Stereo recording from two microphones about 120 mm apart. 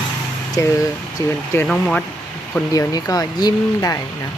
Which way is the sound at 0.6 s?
25° left (ahead or behind).